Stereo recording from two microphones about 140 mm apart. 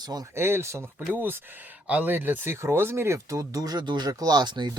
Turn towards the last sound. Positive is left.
turn(degrees=-30)  # may be behind; listen again after turning